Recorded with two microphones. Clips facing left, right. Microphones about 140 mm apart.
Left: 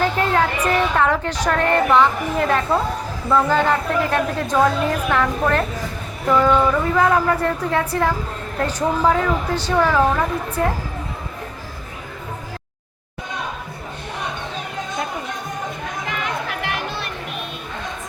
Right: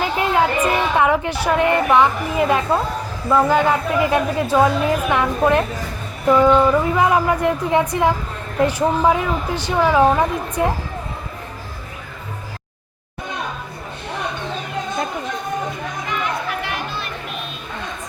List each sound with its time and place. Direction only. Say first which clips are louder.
0.0 s speech: even; 10° right (ahead or behind)
16.0 s chatter: right 3 dB; 90° left